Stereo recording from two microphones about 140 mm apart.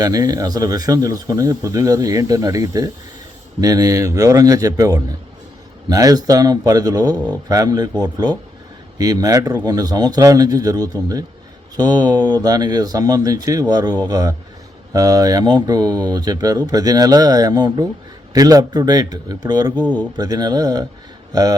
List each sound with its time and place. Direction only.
0.0 s speech: 25° right (ahead or behind)